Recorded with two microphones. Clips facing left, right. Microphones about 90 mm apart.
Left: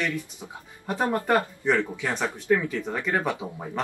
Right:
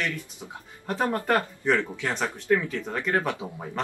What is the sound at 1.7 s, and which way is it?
Speech, 15° left (ahead or behind).